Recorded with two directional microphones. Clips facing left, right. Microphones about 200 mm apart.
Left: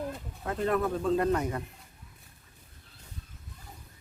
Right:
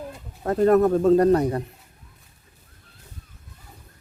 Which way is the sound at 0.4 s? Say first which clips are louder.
Right 11 dB; 40° right (ahead or behind).